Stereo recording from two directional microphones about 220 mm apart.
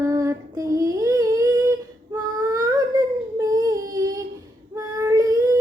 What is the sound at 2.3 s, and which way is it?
Baby cry, 15° right (ahead or behind).